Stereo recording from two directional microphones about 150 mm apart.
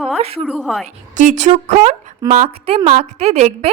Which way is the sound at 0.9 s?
55° right (ahead or behind).